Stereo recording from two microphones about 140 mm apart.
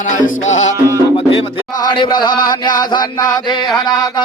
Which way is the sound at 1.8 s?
30° left (ahead or behind).